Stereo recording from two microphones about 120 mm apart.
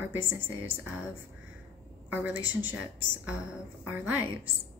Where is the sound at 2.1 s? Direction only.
15° right (ahead or behind).